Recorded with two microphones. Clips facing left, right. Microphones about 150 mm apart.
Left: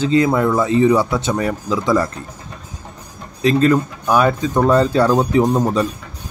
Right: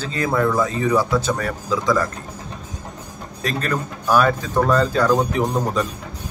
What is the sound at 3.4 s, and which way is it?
A man's voice, 20° left (ahead or behind).